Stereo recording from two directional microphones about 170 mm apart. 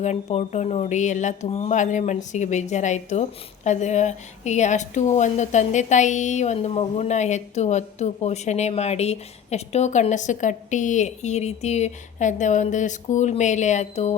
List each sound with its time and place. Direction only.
0.0 s speech: 40° left (ahead or behind)